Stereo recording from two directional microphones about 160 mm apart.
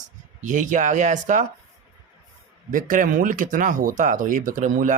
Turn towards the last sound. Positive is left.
turn(degrees=-55)  # may be behind; listen again after turning